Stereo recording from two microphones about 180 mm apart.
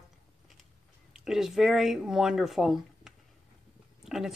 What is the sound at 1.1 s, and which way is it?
Speech, 5° right (ahead or behind).